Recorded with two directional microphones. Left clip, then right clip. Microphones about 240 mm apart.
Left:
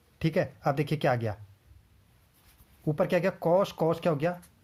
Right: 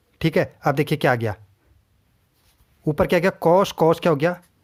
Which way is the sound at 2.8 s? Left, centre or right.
Right.